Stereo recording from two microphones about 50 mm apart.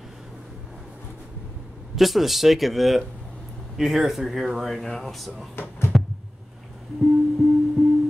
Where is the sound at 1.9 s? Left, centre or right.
Centre.